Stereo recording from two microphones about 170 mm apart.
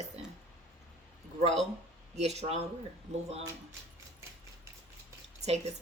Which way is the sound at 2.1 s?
40° right (ahead or behind).